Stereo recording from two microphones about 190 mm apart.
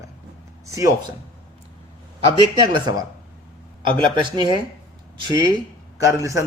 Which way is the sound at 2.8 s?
20° right (ahead or behind).